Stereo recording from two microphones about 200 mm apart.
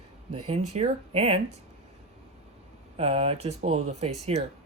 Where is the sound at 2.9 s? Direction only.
30° right (ahead or behind).